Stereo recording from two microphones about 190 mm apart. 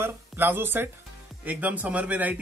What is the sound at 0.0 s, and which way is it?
A man's voice, 10° right (ahead or behind).